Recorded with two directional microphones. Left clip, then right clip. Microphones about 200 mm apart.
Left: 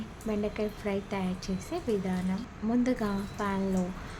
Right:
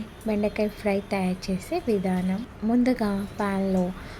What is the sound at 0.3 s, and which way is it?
A woman's voice, 25° right (ahead or behind).